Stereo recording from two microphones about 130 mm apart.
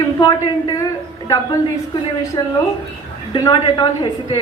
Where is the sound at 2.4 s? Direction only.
35° left (ahead or behind).